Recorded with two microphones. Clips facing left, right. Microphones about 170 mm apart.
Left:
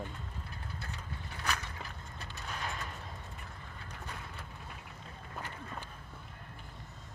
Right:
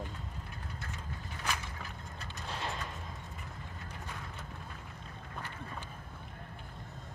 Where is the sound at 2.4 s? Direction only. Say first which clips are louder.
Right 2 dB; 30° right (ahead or behind).